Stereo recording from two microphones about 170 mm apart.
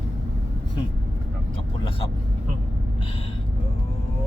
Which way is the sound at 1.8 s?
30° left (ahead or behind).